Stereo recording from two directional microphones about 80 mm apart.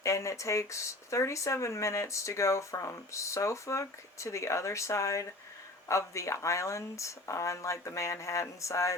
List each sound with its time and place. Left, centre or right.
0.0 s speech: left